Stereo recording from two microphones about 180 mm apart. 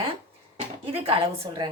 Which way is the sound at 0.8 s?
30° right (ahead or behind).